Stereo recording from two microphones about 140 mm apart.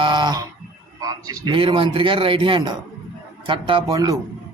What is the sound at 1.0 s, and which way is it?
A man's voice, 30° right (ahead or behind).